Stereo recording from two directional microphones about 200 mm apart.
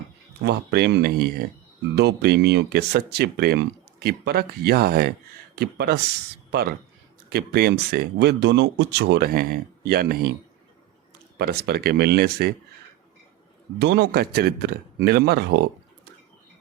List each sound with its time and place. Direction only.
0.4 s speech: 55° right (ahead or behind)
11.3 s speech: 55° right (ahead or behind)
13.7 s a man's voice: 60° right (ahead or behind)